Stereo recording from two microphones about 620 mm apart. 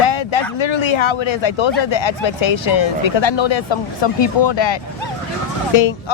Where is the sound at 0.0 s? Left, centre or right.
Left.